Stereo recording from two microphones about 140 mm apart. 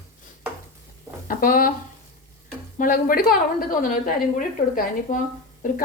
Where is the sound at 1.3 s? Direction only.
90° left.